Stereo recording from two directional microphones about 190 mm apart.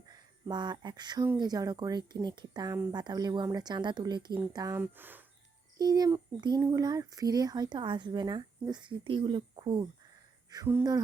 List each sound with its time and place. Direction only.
0.1 s speech: 20° right (ahead or behind)
5.7 s speech: 20° right (ahead or behind)